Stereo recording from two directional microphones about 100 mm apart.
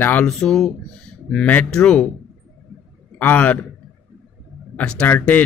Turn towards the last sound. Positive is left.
turn(degrees=15)  # may be behind; listen again after turning